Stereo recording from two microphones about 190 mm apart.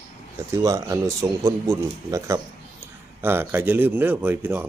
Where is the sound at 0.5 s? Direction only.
15° right (ahead or behind).